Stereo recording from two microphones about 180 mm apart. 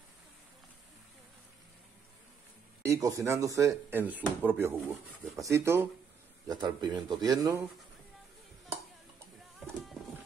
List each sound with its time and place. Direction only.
2.8 s speech: 15° right (ahead or behind)